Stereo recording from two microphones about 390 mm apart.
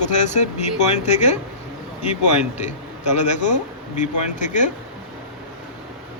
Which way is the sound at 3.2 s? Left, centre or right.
Centre.